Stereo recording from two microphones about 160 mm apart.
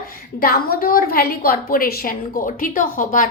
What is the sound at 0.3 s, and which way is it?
A woman's voice, 70° left (ahead or behind).